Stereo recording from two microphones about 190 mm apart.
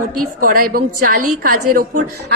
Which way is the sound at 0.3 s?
50° right (ahead or behind).